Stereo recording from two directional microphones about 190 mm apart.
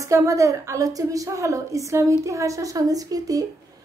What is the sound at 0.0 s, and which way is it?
A woman's voice, 15° right (ahead or behind).